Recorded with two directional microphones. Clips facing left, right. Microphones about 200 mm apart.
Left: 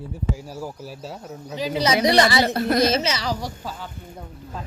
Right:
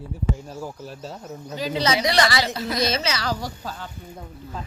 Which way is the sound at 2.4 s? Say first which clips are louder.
Left 5 dB; 55° left (ahead or behind).